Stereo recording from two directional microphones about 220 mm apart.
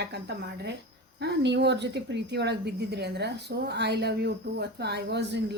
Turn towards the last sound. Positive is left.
turn(degrees=-50)  # may be behind; listen again after turning